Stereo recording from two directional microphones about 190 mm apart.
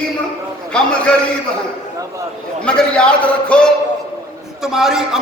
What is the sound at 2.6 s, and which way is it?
A man's voice, 5° left (ahead or behind).